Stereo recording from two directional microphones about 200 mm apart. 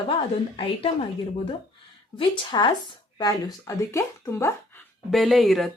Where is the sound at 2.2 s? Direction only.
25° left (ahead or behind).